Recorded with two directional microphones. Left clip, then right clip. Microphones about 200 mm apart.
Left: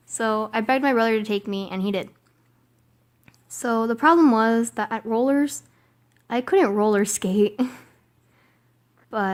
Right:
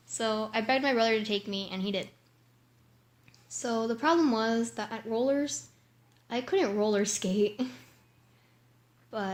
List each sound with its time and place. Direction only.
0.1 s a woman's voice: 50° left (ahead or behind)
3.2 s a woman's voice: 50° left (ahead or behind)
9.0 s speech: 50° left (ahead or behind)